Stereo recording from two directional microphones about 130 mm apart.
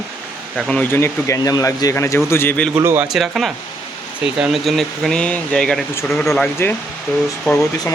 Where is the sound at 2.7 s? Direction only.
15° right (ahead or behind).